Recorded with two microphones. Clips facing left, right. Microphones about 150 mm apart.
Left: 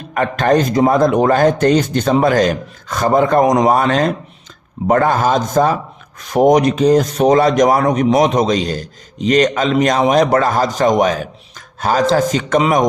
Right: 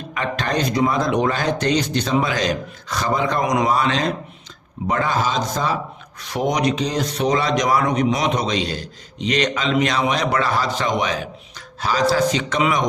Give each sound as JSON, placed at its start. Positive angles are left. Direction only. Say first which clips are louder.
{"t": 0.1, "sound": "a man's voice", "louder": "left 9 dB", "side_deg": 50}